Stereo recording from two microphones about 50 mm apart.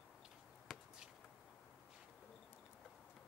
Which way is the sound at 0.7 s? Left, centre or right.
Centre.